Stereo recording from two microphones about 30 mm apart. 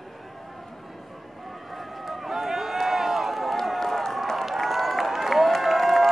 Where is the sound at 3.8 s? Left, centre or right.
Centre.